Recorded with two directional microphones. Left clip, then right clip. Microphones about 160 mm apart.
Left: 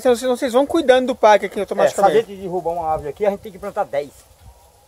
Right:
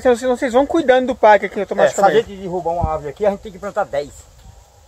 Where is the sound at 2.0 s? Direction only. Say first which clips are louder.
Right 1 dB; 15° left (ahead or behind).